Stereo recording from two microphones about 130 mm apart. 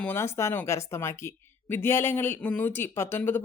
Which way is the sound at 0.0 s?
20° left (ahead or behind).